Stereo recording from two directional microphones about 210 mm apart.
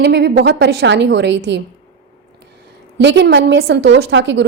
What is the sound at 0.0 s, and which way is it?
A woman's voice, 55° right (ahead or behind).